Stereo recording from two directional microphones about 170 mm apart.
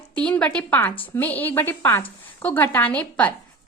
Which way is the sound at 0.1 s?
10° left (ahead or behind).